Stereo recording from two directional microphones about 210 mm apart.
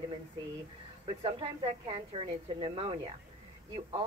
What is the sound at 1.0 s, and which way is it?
Speech, 25° right (ahead or behind).